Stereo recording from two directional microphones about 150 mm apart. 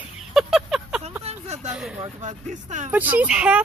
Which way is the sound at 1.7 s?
5° right (ahead or behind).